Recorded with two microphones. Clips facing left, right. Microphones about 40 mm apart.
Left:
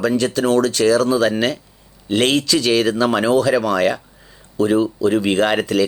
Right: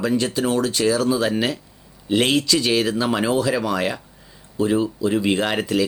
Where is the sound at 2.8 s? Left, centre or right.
Left.